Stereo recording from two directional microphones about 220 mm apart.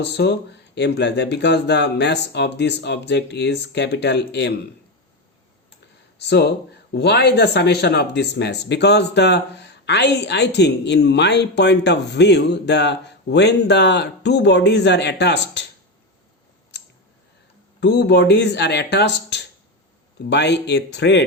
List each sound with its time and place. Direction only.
0.0 s speech: 50° left (ahead or behind)
6.2 s speech: 50° left (ahead or behind)
17.7 s speech: 45° left (ahead or behind)